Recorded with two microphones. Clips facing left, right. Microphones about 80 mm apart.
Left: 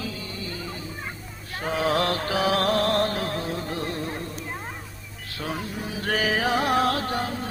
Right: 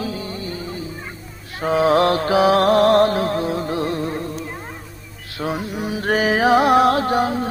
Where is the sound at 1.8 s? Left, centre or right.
Right.